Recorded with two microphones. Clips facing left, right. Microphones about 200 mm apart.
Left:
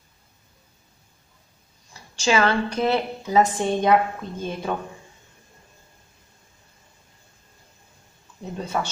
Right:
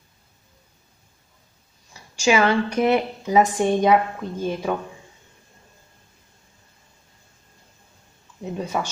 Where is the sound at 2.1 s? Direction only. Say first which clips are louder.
Right 2 dB; 15° right (ahead or behind).